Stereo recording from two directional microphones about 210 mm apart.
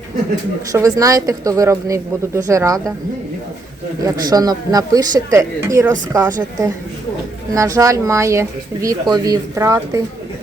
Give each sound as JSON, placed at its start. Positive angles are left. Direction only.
{"t": 0.7, "sound": "speech", "side_deg": -15}
{"t": 4.0, "sound": "speech", "side_deg": -15}
{"t": 7.5, "sound": "speech", "side_deg": -15}